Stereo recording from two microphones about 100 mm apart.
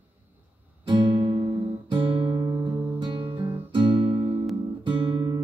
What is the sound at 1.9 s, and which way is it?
Guitar, 60° right (ahead or behind).